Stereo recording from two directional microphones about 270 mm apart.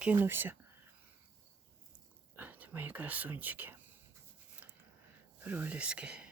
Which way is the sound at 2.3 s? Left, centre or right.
Centre.